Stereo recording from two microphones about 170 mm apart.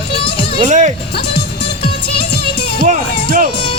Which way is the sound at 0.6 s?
45° right (ahead or behind).